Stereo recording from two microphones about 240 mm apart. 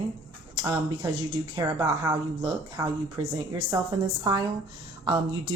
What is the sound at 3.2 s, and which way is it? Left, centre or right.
Speech, centre.